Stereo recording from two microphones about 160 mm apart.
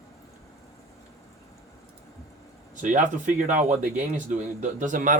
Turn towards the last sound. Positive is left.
turn(degrees=-55)  # may be behind; listen again after turning